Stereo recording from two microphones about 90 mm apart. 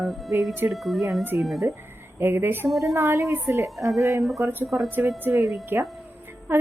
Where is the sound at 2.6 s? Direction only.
Centre (ahead or behind).